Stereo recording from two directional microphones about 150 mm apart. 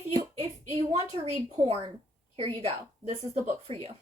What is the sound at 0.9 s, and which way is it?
A woman's voice, 40° right (ahead or behind).